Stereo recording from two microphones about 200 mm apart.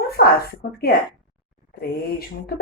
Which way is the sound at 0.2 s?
50° left (ahead or behind).